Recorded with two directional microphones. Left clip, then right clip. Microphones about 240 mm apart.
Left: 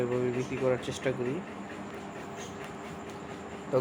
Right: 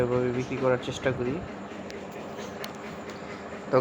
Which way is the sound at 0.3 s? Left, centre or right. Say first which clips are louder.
Right 3 dB; centre.